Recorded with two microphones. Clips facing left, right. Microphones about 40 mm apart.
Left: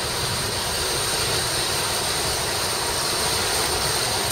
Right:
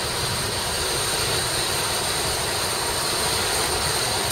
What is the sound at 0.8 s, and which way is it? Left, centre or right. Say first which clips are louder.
Vehicle: even; right.